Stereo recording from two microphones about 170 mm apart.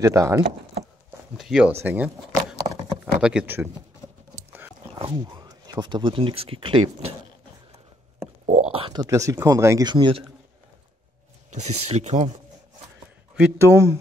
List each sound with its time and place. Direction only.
0.0 s speech: 15° right (ahead or behind)
1.3 s speech: centre (ahead or behind)
1.7 s speech: 10° right (ahead or behind)
3.2 s speech: 5° right (ahead or behind)
4.5 s dog: 10° right (ahead or behind)
4.9 s speech: 30° right (ahead or behind)
8.5 s stomach rumble: 40° right (ahead or behind)
9.0 s speech: 20° right (ahead or behind)
11.5 s speech: 45° right (ahead or behind)
13.4 s speech: 15° right (ahead or behind)